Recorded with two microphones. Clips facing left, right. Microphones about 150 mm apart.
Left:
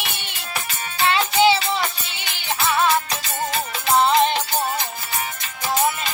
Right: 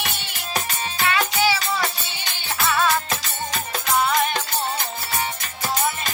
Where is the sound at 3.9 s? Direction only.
25° left (ahead or behind).